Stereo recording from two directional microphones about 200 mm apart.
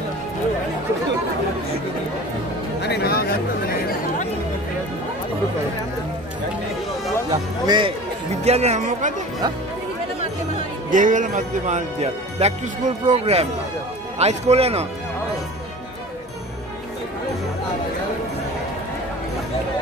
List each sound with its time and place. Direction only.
2.8 s speech: 55° left (ahead or behind)
7.6 s speech: 20° right (ahead or behind)
8.5 s speech: 35° right (ahead or behind)
10.9 s speech: 40° right (ahead or behind)